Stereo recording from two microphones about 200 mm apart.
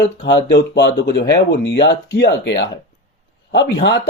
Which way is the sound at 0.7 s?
55° left (ahead or behind).